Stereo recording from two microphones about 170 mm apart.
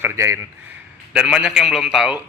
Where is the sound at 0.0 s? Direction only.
15° right (ahead or behind).